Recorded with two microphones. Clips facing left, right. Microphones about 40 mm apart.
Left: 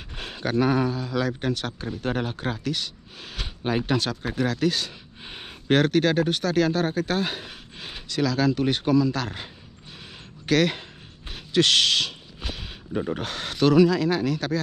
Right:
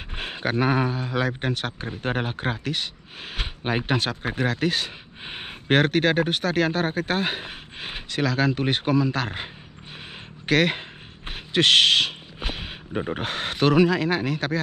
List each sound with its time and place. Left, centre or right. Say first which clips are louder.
0.1 s speech: even; right